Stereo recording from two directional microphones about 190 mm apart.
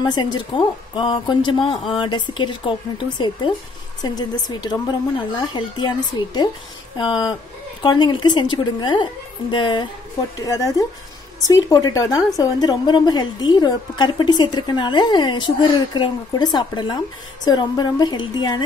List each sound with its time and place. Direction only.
0.0 s a woman's voice: 20° left (ahead or behind)